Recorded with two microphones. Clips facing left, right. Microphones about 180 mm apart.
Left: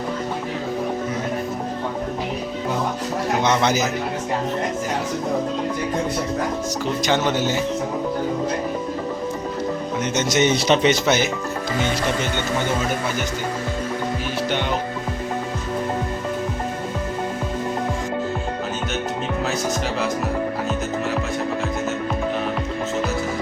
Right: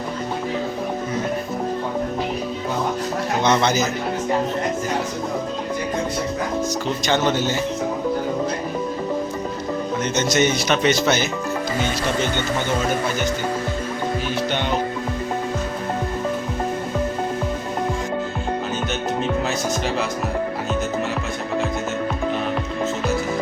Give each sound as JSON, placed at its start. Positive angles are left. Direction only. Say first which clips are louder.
{"t": 3.4, "sound": "speech", "louder": "right 2 dB", "side_deg": 10}
{"t": 7.0, "sound": "speech", "louder": "even", "side_deg": 10}
{"t": 10.3, "sound": "speech", "louder": "left 3 dB", "side_deg": 25}
{"t": 11.0, "sound": "speech", "louder": "left 1 dB", "side_deg": 15}